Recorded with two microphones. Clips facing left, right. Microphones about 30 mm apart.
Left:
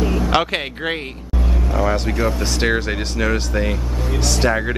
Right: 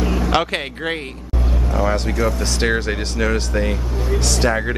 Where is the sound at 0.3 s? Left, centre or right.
Centre.